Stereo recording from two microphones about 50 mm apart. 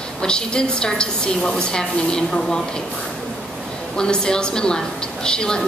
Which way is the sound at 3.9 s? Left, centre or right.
Centre.